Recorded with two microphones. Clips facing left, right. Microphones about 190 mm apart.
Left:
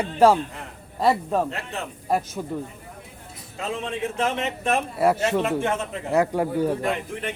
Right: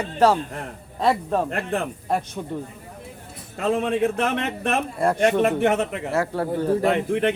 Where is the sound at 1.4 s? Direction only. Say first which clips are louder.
Right 6 dB; 55° right (ahead or behind).